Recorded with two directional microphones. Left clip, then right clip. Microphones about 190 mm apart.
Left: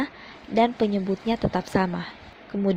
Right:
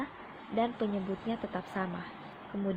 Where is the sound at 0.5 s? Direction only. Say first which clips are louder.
Left 10 dB; 50° left (ahead or behind).